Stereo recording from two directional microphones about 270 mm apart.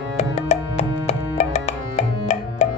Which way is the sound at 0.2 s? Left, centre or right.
Left.